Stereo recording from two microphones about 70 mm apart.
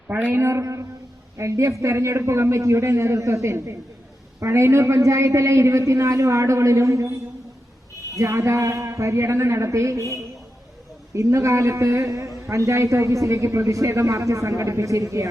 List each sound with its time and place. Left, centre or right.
0.1 s speech: centre
0.3 s speech: right
8.1 s speech: right